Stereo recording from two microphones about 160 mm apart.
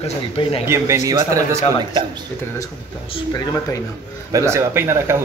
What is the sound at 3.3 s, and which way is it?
Speech, 20° left (ahead or behind).